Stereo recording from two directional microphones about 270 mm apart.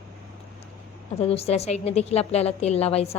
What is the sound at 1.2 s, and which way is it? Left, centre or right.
A woman's voice, left.